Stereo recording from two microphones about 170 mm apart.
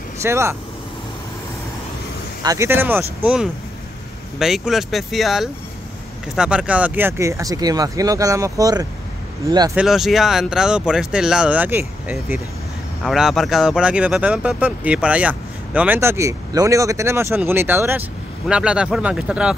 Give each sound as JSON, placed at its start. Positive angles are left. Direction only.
{"t": 0.2, "sound": "speech", "side_deg": -15}
{"t": 2.4, "sound": "speech", "side_deg": -20}
{"t": 9.8, "sound": "speech", "side_deg": 0}